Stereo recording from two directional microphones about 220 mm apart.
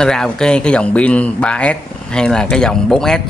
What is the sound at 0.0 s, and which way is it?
Speech, 5° left (ahead or behind).